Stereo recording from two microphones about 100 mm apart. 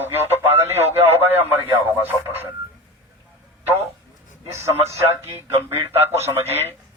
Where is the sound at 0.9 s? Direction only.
20° right (ahead or behind).